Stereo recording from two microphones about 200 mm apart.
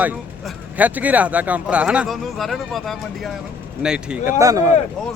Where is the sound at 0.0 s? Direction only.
10° right (ahead or behind).